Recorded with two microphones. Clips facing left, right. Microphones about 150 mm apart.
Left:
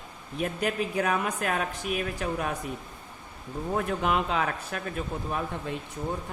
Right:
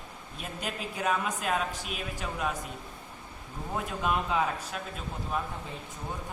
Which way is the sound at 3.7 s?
60° left (ahead or behind).